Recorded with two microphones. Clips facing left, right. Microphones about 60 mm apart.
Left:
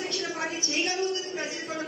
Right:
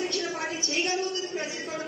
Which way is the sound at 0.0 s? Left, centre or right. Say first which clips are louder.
Right 1 dB; centre.